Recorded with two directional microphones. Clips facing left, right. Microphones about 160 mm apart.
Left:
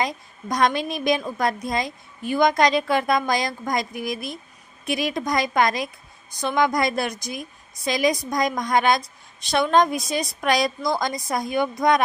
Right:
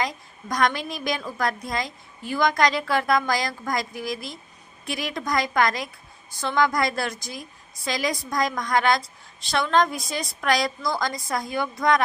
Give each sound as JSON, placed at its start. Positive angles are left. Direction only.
{"t": 0.0, "sound": "a woman's voice", "side_deg": 25}